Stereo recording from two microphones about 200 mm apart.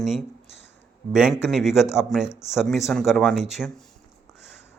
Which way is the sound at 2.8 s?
10° left (ahead or behind).